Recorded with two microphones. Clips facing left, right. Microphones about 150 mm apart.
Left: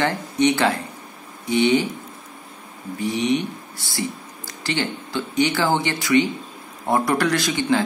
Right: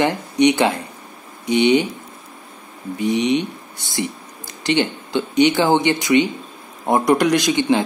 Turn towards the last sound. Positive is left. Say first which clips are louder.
# right 4 dB
turn(degrees=-20)  # may be behind; listen again after turning